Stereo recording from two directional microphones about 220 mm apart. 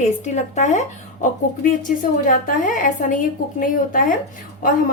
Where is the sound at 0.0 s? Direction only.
30° left (ahead or behind).